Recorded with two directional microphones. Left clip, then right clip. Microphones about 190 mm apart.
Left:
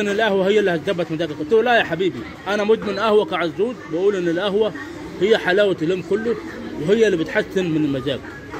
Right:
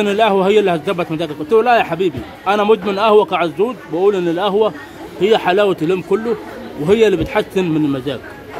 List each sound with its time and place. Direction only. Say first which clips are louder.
0.0 s a man's voice: right 5 dB; 25° right (ahead or behind)